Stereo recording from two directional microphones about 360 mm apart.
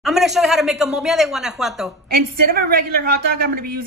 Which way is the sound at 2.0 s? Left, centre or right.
Right.